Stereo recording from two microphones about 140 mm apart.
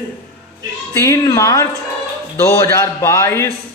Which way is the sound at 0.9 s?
20° left (ahead or behind).